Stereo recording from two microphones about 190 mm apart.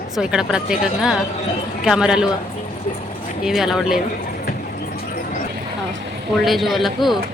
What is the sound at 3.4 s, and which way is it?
Speech, centre (ahead or behind).